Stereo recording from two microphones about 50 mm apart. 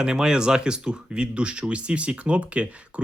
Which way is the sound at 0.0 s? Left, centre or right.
Centre.